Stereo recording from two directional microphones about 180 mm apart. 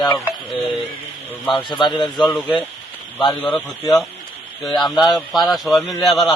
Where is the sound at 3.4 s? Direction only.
Centre (ahead or behind).